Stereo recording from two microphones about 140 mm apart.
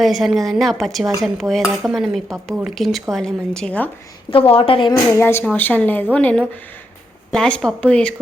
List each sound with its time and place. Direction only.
0.0 s speech: centre (ahead or behind)
4.3 s a woman's voice: 40° left (ahead or behind)
5.1 s a woman's voice: 15° left (ahead or behind)